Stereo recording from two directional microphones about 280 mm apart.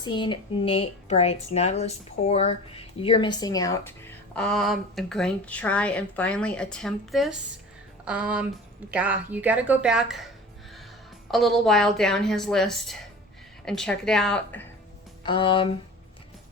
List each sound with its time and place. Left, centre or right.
0.0 s a woman's voice: centre
11.3 s a woman's voice: centre
15.2 s speech: centre